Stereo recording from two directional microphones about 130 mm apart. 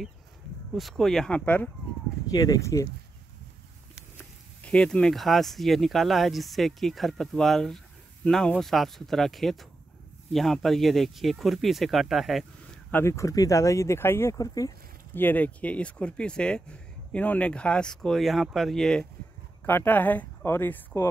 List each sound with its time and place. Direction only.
0.7 s speech: centre (ahead or behind)
2.3 s speech: 30° left (ahead or behind)
4.2 s speech: 10° left (ahead or behind)
12.9 s speech: 20° left (ahead or behind)
15.1 s speech: 15° left (ahead or behind)
19.6 s speech: 15° left (ahead or behind)